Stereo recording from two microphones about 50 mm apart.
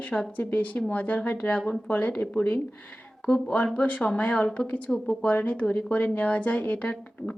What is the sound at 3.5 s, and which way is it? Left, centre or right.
Speech, left.